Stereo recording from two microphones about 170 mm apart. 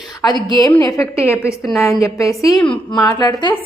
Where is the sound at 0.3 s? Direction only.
25° left (ahead or behind).